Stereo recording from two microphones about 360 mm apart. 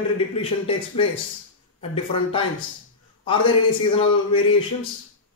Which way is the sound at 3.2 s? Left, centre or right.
Centre.